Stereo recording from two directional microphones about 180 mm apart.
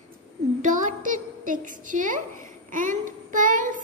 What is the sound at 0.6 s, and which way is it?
Speech, 45° right (ahead or behind).